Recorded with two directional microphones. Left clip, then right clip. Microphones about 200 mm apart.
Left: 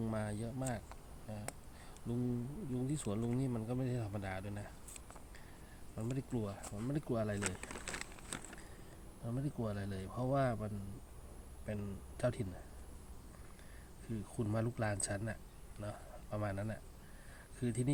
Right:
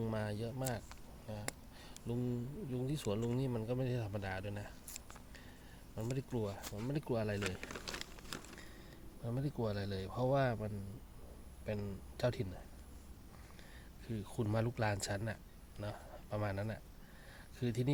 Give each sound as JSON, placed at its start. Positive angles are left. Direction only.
{"t": 0.0, "sound": "a sound", "side_deg": -35}
{"t": 2.1, "sound": "speech", "side_deg": -35}
{"t": 6.0, "sound": "speech", "side_deg": -35}
{"t": 7.4, "sound": "speech", "side_deg": -5}
{"t": 9.2, "sound": "speech", "side_deg": -35}
{"t": 14.1, "sound": "speech", "side_deg": -40}